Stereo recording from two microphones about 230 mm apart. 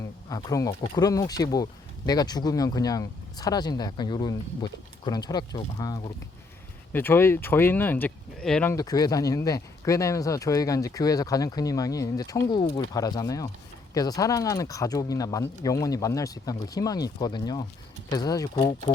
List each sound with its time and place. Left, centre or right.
0.3 s speech: centre